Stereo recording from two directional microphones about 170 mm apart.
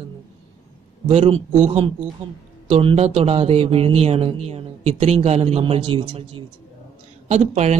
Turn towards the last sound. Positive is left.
turn(degrees=-40)  # may be behind; listen again after turning